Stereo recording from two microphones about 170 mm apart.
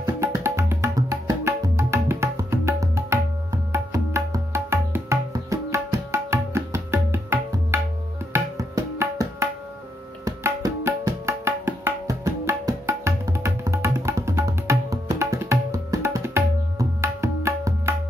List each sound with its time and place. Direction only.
0.0 s music: 15° right (ahead or behind)
8.3 s tabla: 15° right (ahead or behind)